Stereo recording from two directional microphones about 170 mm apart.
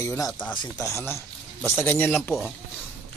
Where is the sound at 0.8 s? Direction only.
15° left (ahead or behind).